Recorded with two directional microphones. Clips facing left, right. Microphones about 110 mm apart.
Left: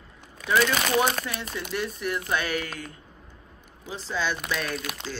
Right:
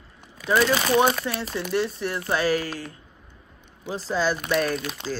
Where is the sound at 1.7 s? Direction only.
30° right (ahead or behind).